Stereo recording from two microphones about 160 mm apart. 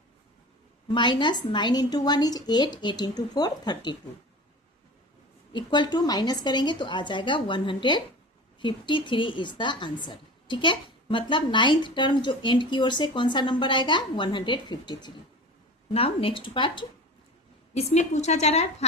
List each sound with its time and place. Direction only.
0.9 s a woman's voice: 30° left (ahead or behind)
5.5 s a woman's voice: 30° left (ahead or behind)
17.7 s a woman's voice: 45° left (ahead or behind)